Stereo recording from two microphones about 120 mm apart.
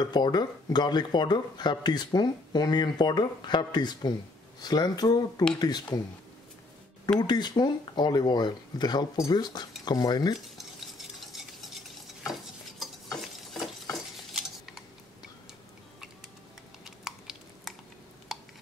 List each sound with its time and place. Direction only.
0.0 s speech: 35° left (ahead or behind)
7.2 s speech: 35° left (ahead or behind)
11.0 s stir: centre (ahead or behind)
16.8 s a sound: 5° right (ahead or behind)